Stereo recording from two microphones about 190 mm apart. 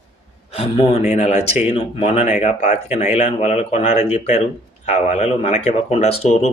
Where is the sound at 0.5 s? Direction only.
30° left (ahead or behind).